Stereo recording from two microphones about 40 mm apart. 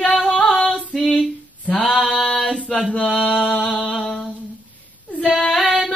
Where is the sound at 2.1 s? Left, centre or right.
Left.